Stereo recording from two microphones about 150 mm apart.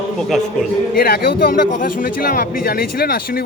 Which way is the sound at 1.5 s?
70° left (ahead or behind).